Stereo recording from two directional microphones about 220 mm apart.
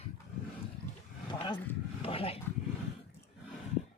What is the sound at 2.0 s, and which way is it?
Speech, 25° left (ahead or behind).